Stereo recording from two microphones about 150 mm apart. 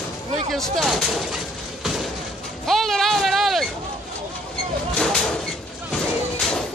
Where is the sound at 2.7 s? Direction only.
Centre (ahead or behind).